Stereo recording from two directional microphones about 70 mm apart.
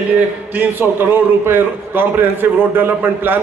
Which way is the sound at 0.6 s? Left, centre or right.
Right.